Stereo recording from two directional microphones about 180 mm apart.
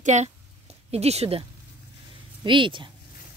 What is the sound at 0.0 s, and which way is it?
A woman's voice, 40° right (ahead or behind).